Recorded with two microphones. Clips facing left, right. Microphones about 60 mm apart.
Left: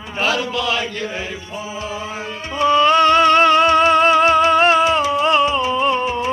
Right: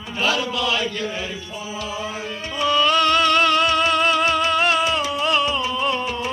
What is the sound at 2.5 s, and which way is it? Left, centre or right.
Music, left.